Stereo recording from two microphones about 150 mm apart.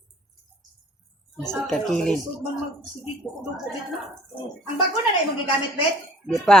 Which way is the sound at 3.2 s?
10° left (ahead or behind).